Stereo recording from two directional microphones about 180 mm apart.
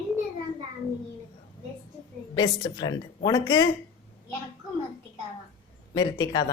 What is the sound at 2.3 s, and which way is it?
A woman's voice, 20° left (ahead or behind).